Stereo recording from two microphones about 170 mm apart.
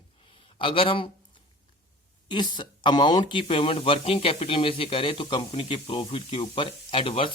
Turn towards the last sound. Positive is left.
turn(degrees=30)  # may be behind; listen again after turning